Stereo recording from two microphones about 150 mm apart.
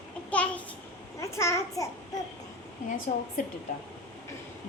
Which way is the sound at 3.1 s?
60° left (ahead or behind).